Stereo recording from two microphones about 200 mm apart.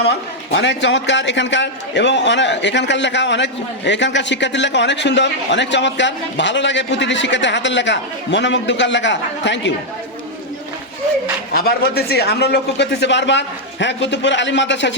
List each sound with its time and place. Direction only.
0.5 s a man's voice: 65° left (ahead or behind)
11.5 s a man's voice: 50° left (ahead or behind)